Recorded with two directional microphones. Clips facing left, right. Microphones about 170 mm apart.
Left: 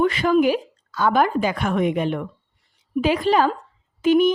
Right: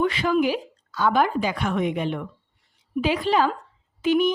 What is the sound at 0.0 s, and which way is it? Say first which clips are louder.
Speech: left 4 dB; 45° left (ahead or behind).